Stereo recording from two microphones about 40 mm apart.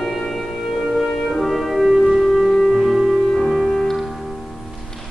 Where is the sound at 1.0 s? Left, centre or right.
Centre.